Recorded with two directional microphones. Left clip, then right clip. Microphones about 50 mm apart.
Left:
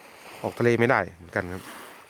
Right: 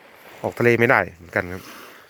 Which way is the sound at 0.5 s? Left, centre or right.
Right.